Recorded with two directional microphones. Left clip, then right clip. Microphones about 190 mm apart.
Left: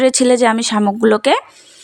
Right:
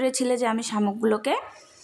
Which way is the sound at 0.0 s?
35° left (ahead or behind).